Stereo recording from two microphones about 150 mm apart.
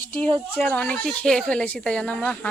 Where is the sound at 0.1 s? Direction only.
10° left (ahead or behind).